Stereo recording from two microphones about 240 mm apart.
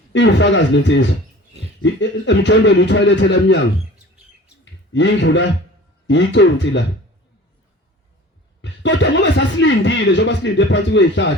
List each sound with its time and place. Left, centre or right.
0.1 s speech: left
4.9 s speech: left
8.6 s speech: left